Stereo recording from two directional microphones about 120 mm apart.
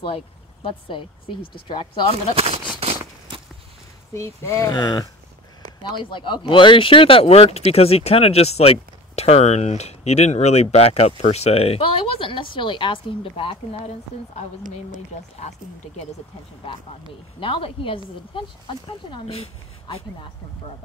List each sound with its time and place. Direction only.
0.0 s speech: 50° left (ahead or behind)
2.3 s speech: 55° right (ahead or behind)
2.8 s a sound: 55° right (ahead or behind)
4.1 s speech: 25° left (ahead or behind); by 14.4 s 55° left (ahead or behind)
17.4 s speech: 45° left (ahead or behind)